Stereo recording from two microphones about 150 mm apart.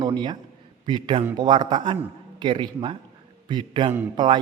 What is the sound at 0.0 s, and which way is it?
A man's voice, 30° right (ahead or behind).